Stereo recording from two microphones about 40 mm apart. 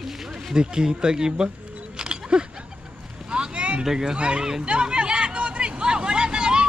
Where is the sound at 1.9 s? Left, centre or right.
Right.